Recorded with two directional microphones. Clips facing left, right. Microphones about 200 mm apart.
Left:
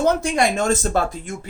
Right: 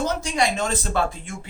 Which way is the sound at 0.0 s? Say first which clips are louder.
Left 5 dB; 55° left (ahead or behind).